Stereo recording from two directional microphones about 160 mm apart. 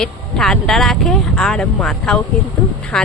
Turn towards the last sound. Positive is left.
turn(degrees=5)  # may be behind; listen again after turning